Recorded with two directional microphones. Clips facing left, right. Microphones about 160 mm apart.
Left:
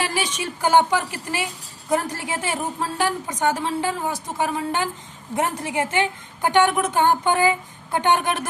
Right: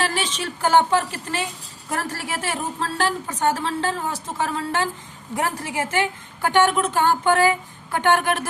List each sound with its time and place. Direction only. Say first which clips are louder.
0.0 s a woman's voice: even; 15° left (ahead or behind)